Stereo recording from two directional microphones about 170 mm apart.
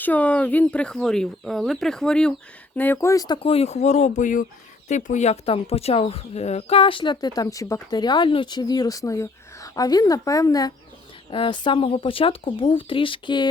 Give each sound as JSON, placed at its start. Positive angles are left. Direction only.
{"t": 0.0, "sound": "speech", "side_deg": 10}